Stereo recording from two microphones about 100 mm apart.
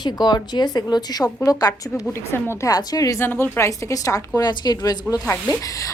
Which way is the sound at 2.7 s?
40° left (ahead or behind).